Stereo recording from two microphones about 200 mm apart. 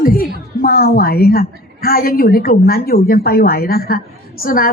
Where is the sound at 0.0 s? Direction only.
45° left (ahead or behind).